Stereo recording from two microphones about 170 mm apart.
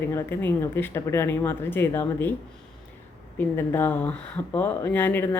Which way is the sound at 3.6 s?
10° left (ahead or behind).